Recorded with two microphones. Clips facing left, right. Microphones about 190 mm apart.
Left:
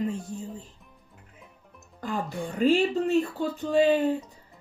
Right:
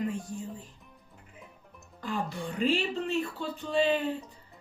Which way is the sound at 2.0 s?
45° left (ahead or behind).